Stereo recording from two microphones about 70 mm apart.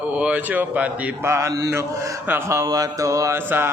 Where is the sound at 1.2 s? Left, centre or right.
Right.